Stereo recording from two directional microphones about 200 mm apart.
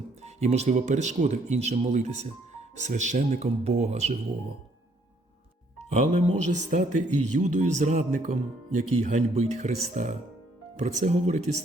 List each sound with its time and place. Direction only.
0.2 s speech: 35° right (ahead or behind)
5.9 s speech: 35° right (ahead or behind)